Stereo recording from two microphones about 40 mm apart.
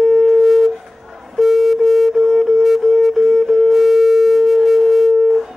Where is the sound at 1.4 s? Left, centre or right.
Centre.